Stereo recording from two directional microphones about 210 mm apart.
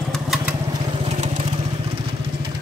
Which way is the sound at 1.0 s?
30° right (ahead or behind).